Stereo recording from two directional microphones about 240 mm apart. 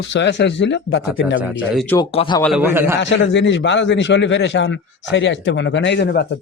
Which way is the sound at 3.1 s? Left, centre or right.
Left.